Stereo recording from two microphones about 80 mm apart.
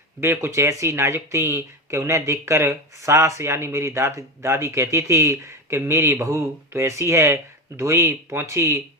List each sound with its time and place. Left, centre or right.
0.2 s speech: right